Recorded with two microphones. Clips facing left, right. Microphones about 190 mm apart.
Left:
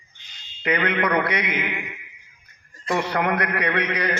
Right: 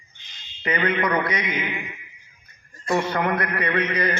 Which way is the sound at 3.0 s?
65° left (ahead or behind).